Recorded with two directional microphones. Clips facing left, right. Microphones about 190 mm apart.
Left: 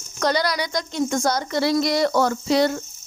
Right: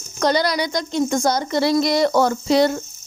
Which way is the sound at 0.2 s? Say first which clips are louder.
Right 3 dB; 25° right (ahead or behind).